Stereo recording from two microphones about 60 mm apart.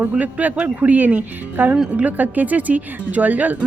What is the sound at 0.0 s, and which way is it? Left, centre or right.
A woman's voice, right.